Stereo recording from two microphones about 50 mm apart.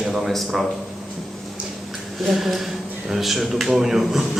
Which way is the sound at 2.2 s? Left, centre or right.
Centre.